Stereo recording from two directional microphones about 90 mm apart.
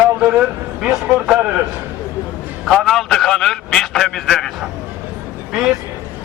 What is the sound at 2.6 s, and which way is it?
A man's voice, 5° right (ahead or behind).